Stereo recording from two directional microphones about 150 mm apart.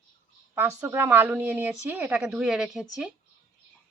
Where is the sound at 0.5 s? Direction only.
15° right (ahead or behind).